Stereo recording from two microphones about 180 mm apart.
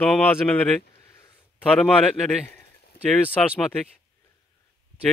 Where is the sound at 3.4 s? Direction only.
5° left (ahead or behind).